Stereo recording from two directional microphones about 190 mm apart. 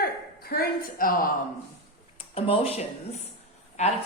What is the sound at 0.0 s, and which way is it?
A woman's voice, 55° left (ahead or behind).